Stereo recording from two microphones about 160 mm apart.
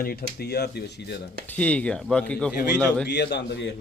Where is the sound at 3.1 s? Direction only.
90° left.